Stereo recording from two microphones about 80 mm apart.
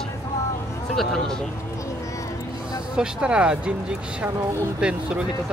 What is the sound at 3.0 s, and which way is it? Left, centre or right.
Speech, centre.